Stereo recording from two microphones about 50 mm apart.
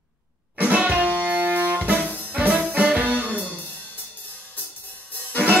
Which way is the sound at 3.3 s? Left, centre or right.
Left.